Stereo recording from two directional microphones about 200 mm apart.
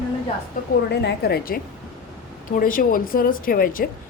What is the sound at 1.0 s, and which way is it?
Speech, 50° left (ahead or behind).